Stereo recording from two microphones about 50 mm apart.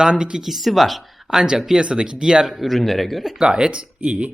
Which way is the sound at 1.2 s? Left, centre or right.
Centre.